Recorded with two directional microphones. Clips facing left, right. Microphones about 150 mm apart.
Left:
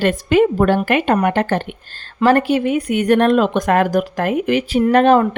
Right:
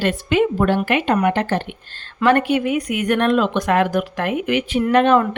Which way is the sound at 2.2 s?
35° left (ahead or behind).